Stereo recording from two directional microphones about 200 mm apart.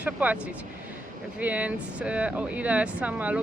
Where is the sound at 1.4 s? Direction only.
10° right (ahead or behind).